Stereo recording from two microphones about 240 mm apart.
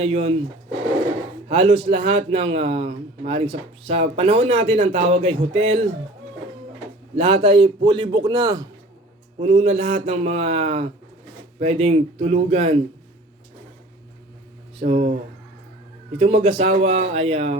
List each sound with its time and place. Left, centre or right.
0.0 s a man's voice: right
1.5 s a man's voice: right
7.2 s a man's voice: right
9.4 s a man's voice: right
14.8 s a man's voice: right
16.1 s a man's voice: right